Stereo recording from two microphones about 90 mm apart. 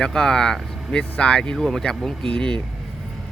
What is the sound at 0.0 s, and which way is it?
Speech, 5° left (ahead or behind).